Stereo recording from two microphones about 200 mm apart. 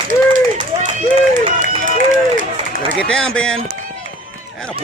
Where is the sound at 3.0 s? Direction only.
5° left (ahead or behind).